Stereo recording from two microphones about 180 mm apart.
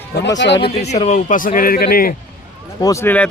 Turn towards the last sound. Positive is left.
turn(degrees=15)  # may be behind; listen again after turning